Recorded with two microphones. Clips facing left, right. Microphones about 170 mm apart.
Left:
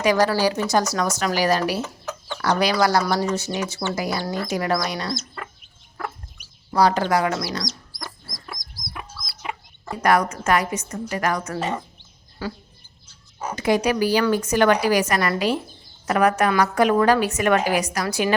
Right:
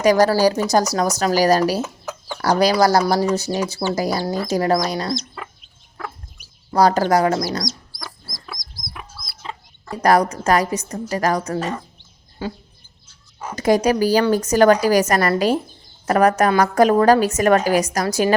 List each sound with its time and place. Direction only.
0.0 s a woman's voice: 40° right (ahead or behind)
1.8 s chicken: 5° right (ahead or behind)
2.4 s a woman's voice: 40° right (ahead or behind)
5.1 s chicken: 5° right (ahead or behind)
6.7 s a woman's voice: 40° right (ahead or behind)
10.0 s a woman's voice: 35° right (ahead or behind)
12.4 s speech: 20° right (ahead or behind)
13.6 s a woman's voice: 40° right (ahead or behind)